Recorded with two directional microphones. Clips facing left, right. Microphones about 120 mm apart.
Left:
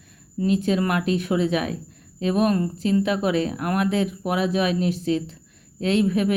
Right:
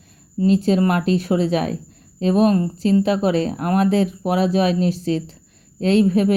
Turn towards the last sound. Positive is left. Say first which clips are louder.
# right 5 dB
turn(degrees=-35)  # may be behind; listen again after turning